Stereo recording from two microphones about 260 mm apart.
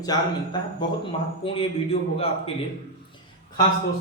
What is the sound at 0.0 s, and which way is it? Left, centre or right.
A man's voice, centre.